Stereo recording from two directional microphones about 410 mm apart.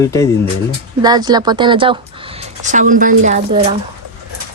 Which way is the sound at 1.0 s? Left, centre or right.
Centre.